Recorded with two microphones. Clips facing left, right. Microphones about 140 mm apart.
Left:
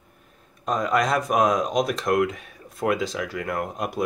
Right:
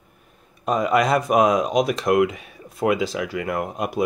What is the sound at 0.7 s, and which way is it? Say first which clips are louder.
Speech: right 3 dB; 5° right (ahead or behind).